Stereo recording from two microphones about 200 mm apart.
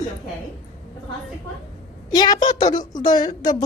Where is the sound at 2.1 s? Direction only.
20° left (ahead or behind).